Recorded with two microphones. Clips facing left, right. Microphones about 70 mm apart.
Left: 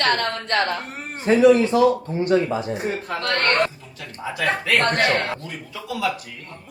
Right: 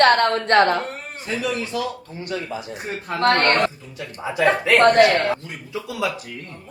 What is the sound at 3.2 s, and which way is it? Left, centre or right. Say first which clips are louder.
Speech: right 5 dB; right.